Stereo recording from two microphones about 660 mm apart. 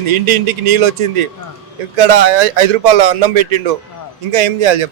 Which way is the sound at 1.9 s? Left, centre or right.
Right.